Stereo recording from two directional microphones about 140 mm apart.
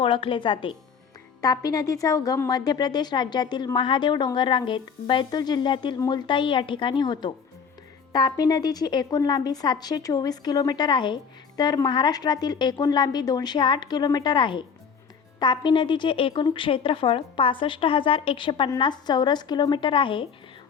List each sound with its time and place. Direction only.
0.0 s a woman's voice: 40° left (ahead or behind)
1.4 s a woman's voice: 25° left (ahead or behind)